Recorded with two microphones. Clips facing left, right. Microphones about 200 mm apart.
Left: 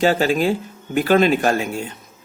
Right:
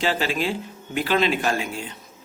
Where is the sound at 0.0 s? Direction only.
45° left (ahead or behind).